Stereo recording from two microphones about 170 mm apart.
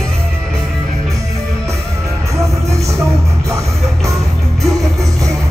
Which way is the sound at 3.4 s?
20° right (ahead or behind).